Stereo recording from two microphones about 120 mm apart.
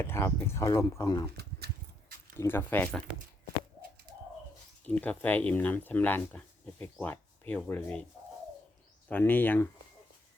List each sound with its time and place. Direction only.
0.0 s speech: 20° left (ahead or behind)
2.4 s speech: 20° left (ahead or behind)
4.9 s speech: 15° left (ahead or behind)
9.0 s speech: 15° left (ahead or behind)